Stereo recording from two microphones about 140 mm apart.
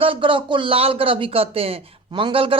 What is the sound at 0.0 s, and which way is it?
Speech, 40° right (ahead or behind).